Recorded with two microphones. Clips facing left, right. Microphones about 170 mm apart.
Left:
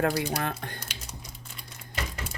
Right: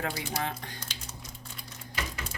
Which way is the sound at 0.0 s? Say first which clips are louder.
Left 6 dB; 60° left (ahead or behind).